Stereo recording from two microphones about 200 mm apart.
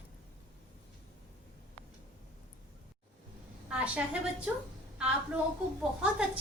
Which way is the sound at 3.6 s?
5° right (ahead or behind).